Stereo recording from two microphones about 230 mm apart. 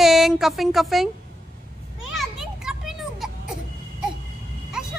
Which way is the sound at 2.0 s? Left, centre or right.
Centre.